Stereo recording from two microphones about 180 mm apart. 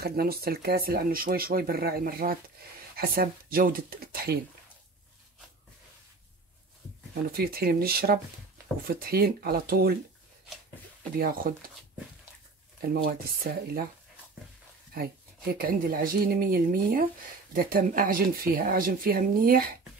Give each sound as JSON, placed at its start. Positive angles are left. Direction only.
{"t": 0.0, "sound": "speech", "side_deg": -55}
{"t": 7.3, "sound": "speech", "side_deg": -55}
{"t": 11.1, "sound": "speech", "side_deg": -55}
{"t": 12.8, "sound": "speech", "side_deg": -55}
{"t": 15.0, "sound": "speech", "side_deg": -55}